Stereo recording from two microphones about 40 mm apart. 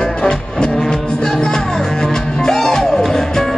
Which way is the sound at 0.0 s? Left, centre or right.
Centre.